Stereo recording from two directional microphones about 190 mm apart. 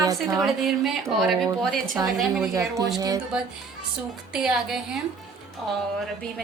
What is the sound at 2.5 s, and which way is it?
Speech, 15° right (ahead or behind).